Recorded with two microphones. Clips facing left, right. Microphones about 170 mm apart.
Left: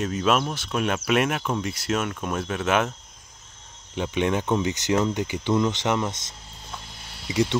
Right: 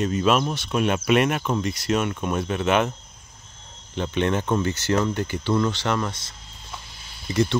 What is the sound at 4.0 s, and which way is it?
Speech, 10° left (ahead or behind).